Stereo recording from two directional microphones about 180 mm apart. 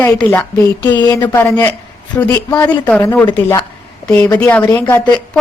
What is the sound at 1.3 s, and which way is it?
A woman's voice, 10° left (ahead or behind).